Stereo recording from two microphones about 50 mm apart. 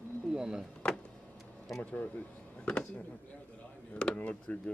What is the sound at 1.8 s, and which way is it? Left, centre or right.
Speech, left.